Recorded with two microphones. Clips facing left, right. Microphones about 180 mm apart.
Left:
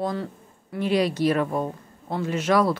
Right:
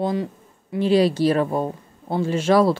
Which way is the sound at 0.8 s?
30° right (ahead or behind).